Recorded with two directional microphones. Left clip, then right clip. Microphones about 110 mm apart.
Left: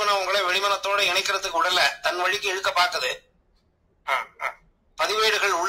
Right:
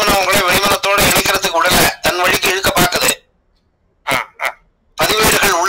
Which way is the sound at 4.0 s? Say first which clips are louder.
Right 8 dB; 35° right (ahead or behind).